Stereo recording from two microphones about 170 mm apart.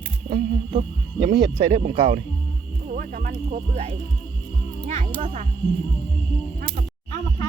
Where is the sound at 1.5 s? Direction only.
25° right (ahead or behind).